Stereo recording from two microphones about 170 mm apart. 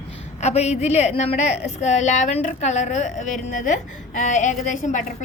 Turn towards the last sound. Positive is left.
turn(degrees=50)  # may be behind; listen again after turning